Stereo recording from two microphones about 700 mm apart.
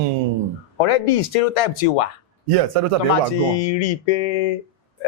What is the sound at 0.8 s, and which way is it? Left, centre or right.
Speech, left.